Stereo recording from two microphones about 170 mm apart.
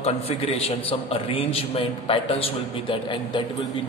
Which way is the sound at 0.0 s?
35° left (ahead or behind).